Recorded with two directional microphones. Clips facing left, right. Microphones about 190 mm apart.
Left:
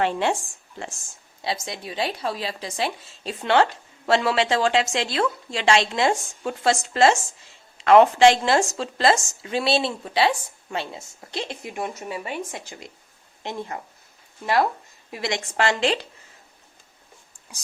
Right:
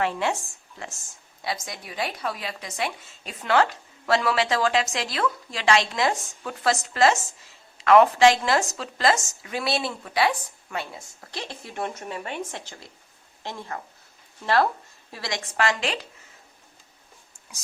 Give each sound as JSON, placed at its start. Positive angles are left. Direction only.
{"t": 0.0, "sound": "a woman's voice", "side_deg": 30}
{"t": 1.5, "sound": "a woman's voice", "side_deg": 25}
{"t": 15.1, "sound": "a woman's voice", "side_deg": 20}